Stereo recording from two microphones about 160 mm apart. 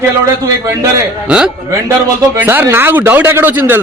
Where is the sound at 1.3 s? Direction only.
5° right (ahead or behind).